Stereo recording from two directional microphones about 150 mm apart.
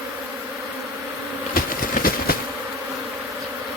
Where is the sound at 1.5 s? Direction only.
75° left (ahead or behind).